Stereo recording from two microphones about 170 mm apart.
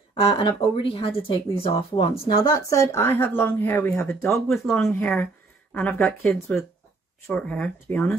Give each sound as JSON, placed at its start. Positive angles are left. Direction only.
{"t": 0.1, "sound": "speech", "side_deg": 30}
{"t": 2.3, "sound": "speech", "side_deg": 20}